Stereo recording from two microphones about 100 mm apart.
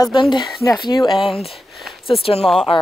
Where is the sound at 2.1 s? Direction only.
70° left (ahead or behind).